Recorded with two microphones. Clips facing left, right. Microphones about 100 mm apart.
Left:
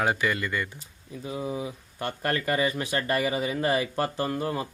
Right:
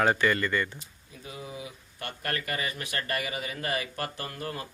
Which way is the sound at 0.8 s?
30° left (ahead or behind).